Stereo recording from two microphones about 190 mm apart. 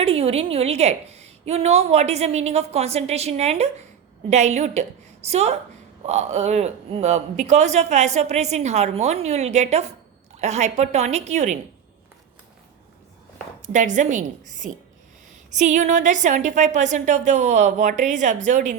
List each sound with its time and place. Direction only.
0.0 s a woman's voice: 30° right (ahead or behind)
13.6 s a woman's voice: 40° right (ahead or behind)